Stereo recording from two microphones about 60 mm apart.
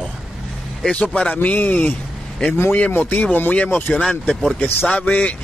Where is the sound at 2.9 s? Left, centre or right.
Left.